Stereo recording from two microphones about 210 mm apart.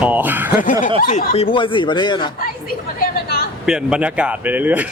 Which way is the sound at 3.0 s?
50° left (ahead or behind).